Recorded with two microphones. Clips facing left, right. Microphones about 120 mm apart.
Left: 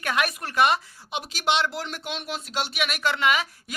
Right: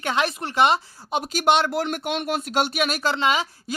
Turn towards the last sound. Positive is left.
turn(degrees=-30)  # may be behind; listen again after turning